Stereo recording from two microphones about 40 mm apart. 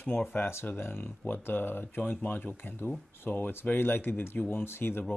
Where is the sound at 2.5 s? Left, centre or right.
Left.